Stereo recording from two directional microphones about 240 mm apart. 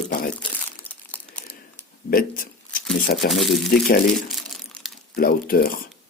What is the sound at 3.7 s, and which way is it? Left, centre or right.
Speech, left.